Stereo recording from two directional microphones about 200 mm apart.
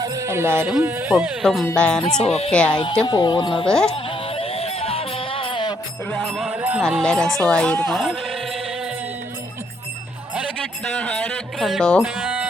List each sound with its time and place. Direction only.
0.0 s a sound: 15° right (ahead or behind)
0.8 s speech: 10° right (ahead or behind)
2.2 s speech: 30° left (ahead or behind)
2.5 s speech: 5° left (ahead or behind)
2.7 s speech: 25° left (ahead or behind)
3.7 s speech: 5° left (ahead or behind)
3.9 s music: 30° left (ahead or behind)
6.1 s speech: centre (ahead or behind)
6.8 s speech: 5° left (ahead or behind)
10.9 s a sound: 5° left (ahead or behind)
11.6 s speech: centre (ahead or behind)